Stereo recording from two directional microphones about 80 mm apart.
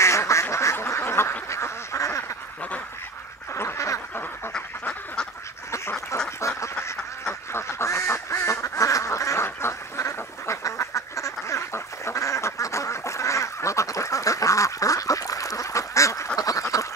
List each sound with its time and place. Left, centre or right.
0.0 s duck: left
3.5 s duck: left
4.5 s duck: centre
6.4 s duck: left